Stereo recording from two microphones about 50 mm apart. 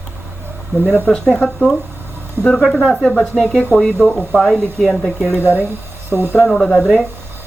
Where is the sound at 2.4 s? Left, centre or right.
Right.